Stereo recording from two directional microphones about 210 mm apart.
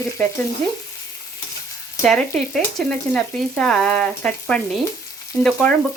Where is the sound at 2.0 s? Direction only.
Centre (ahead or behind).